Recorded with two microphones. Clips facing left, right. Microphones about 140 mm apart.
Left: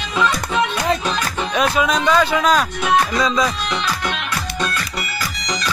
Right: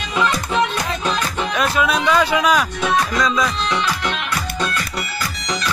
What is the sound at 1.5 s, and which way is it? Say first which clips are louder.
Speech: left 2 dB; centre (ahead or behind).